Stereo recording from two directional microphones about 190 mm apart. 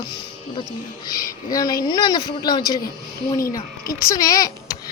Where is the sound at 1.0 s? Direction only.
20° left (ahead or behind).